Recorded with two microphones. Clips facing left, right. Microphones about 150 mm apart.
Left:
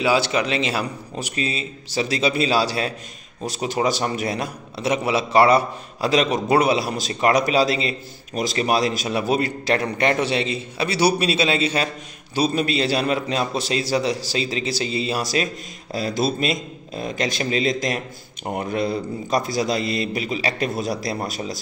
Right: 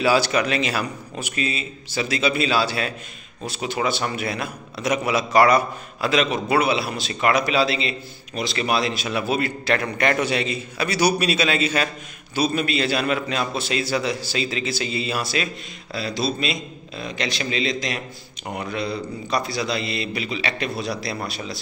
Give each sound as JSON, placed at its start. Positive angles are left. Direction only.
{"t": 0.0, "sound": "a man's voice", "side_deg": 20}